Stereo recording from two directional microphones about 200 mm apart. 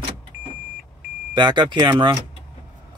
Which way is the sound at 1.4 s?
25° right (ahead or behind).